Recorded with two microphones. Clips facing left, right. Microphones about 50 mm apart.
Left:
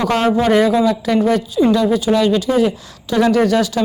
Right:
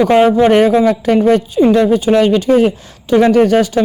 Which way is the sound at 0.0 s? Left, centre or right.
Centre.